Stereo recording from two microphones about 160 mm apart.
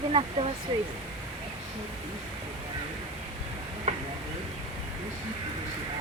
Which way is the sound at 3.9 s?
45° right (ahead or behind).